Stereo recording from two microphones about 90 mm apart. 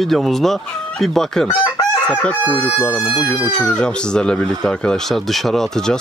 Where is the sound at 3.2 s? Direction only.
45° left (ahead or behind).